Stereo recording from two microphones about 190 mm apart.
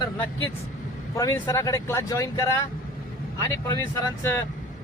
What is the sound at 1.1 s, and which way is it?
Speech, 15° left (ahead or behind).